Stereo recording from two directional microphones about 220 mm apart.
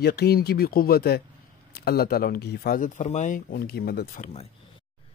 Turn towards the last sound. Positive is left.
turn(degrees=30)  # may be behind; listen again after turning